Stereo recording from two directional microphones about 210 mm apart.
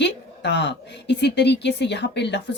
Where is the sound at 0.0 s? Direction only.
55° left (ahead or behind).